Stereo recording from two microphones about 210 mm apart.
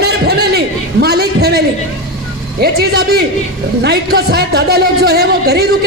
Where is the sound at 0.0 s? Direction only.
50° right (ahead or behind).